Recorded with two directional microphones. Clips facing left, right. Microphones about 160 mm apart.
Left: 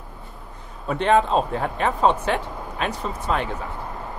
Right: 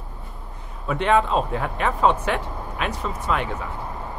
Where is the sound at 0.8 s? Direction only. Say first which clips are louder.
Left 1 dB; 35° left (ahead or behind).